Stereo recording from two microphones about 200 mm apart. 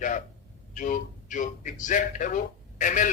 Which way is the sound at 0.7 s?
40° left (ahead or behind).